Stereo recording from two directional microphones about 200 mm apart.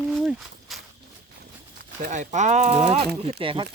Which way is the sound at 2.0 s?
40° right (ahead or behind).